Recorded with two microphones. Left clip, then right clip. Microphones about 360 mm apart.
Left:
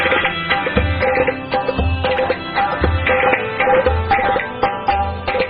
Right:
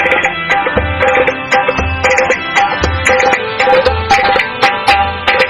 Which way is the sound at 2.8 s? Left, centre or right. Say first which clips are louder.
Right 5 dB; right.